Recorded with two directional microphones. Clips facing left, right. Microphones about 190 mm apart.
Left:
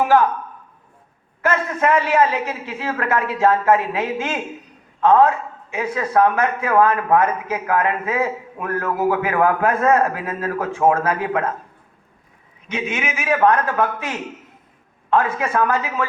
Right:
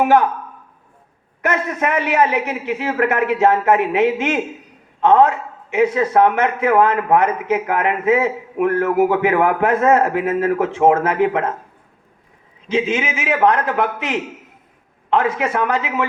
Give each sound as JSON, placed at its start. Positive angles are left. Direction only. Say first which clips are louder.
{"t": 1.4, "sound": "a man's voice", "louder": "even", "side_deg": -20}
{"t": 12.6, "sound": "a man's voice", "louder": "right 6 dB", "side_deg": -30}